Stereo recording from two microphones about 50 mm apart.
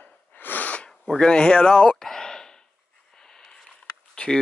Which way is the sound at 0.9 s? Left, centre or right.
Centre.